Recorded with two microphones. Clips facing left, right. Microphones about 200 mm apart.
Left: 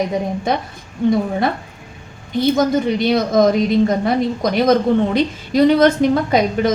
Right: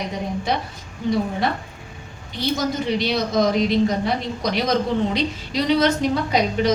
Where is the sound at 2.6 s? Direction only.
50° left (ahead or behind).